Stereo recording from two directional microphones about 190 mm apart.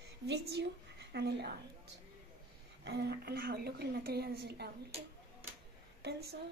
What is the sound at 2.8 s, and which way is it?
A woman's voice, 60° right (ahead or behind).